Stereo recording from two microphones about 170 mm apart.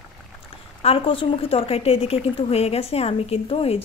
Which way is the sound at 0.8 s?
30° left (ahead or behind).